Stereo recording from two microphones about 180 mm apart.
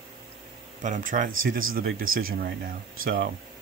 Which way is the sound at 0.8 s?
45° right (ahead or behind).